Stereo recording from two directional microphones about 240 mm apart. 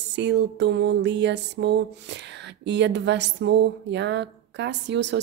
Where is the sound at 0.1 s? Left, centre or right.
Right.